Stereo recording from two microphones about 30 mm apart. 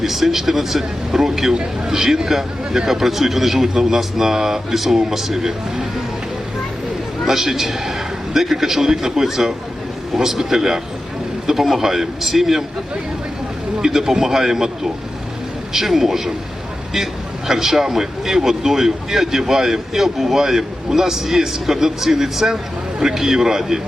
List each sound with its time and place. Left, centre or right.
0.0 s a man's voice: centre
7.3 s a man's voice: centre
14.1 s a man's voice: centre
15.7 s speech: centre
17.5 s speech: centre